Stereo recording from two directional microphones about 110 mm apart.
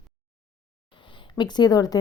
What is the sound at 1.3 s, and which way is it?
Speech, 40° left (ahead or behind).